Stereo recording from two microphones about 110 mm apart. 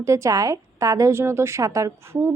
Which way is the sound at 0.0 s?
25° right (ahead or behind).